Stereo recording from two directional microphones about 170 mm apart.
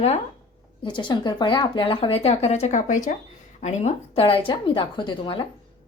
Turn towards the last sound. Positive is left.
turn(degrees=30)  # may be behind; listen again after turning